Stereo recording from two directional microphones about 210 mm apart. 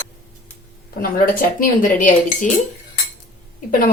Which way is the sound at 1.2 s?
40° left (ahead or behind).